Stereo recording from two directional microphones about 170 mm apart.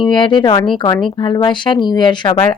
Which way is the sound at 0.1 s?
30° left (ahead or behind).